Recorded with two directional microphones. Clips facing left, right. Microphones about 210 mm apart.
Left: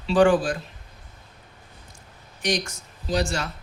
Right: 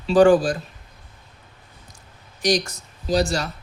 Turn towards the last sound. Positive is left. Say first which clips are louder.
# right 4 dB
turn(degrees=-35)  # may be behind; listen again after turning